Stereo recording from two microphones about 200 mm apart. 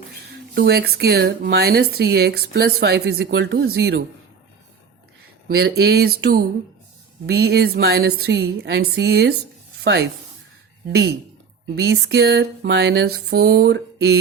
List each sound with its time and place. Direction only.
0.5 s speech: 55° right (ahead or behind)
5.5 s speech: 55° right (ahead or behind)
10.8 s a sound: 55° right (ahead or behind)